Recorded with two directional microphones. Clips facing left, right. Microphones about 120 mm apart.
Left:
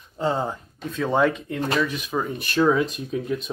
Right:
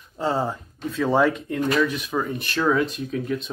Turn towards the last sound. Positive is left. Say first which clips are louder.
# even
turn(degrees=5)  # may be behind; listen again after turning